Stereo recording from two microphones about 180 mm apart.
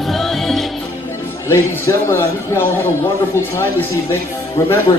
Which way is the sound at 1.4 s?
15° left (ahead or behind).